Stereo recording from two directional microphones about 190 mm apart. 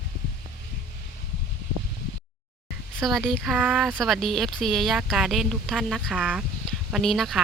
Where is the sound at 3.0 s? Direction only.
Centre (ahead or behind).